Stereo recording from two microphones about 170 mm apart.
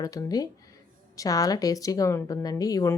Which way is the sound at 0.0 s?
20° left (ahead or behind).